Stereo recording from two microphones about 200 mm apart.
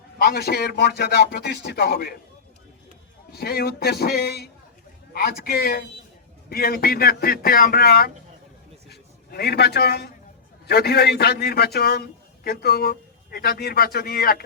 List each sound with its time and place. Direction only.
0.2 s speech: 55° left (ahead or behind)
3.3 s a man's voice: 50° left (ahead or behind)